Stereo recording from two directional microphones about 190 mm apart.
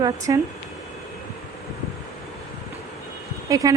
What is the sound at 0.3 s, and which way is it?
Speech, 20° right (ahead or behind).